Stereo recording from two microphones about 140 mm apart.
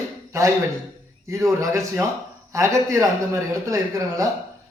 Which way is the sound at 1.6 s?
20° right (ahead or behind).